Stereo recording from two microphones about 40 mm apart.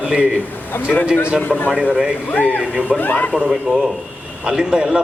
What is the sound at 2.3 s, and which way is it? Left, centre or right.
Speech, left.